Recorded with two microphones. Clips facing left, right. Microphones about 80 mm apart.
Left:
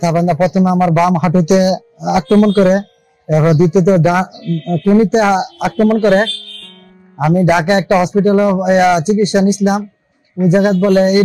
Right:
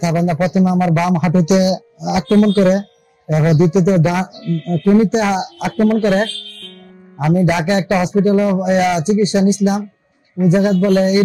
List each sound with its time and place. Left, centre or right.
0.0 s speech: left